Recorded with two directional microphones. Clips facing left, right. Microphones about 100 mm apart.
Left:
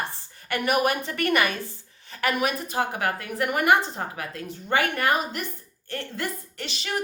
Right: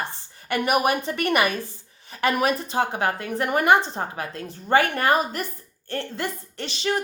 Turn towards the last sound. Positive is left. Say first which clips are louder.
# right 4 dB
turn(degrees=-30)  # may be behind; listen again after turning